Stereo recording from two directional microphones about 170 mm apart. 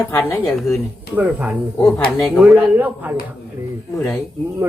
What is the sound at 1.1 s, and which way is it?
Speech, 10° right (ahead or behind).